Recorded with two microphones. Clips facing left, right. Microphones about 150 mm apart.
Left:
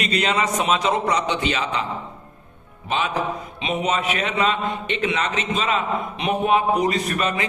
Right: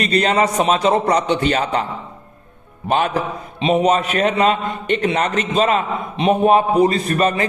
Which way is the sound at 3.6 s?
35° right (ahead or behind).